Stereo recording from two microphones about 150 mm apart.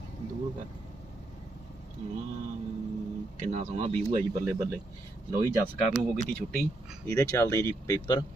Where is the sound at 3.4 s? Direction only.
55° right (ahead or behind).